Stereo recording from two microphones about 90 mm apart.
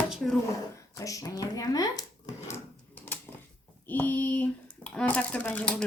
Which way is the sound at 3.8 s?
20° left (ahead or behind).